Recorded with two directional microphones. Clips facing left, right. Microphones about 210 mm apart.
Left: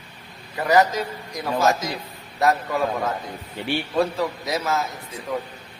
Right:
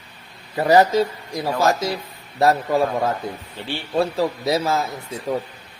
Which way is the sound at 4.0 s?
30° right (ahead or behind).